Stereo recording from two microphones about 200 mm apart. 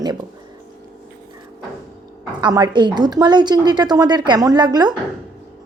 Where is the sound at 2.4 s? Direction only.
20° right (ahead or behind).